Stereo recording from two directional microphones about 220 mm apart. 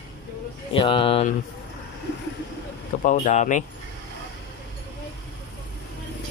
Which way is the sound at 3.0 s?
30° left (ahead or behind).